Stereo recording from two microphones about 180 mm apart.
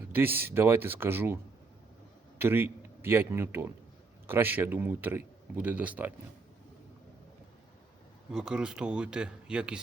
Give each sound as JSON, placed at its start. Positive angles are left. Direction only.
{"t": 0.1, "sound": "a man's voice", "side_deg": -10}
{"t": 2.4, "sound": "a man's voice", "side_deg": -10}
{"t": 8.3, "sound": "speech", "side_deg": -5}